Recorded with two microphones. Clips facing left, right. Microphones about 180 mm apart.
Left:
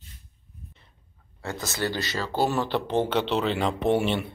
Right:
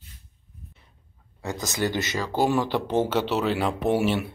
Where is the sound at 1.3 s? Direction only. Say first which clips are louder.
Right 2 dB; 15° right (ahead or behind).